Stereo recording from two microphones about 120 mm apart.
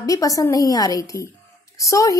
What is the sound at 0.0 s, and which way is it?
A woman's voice, 30° left (ahead or behind).